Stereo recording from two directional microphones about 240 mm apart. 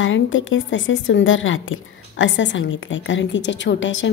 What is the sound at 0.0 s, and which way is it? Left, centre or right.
A woman's voice, left.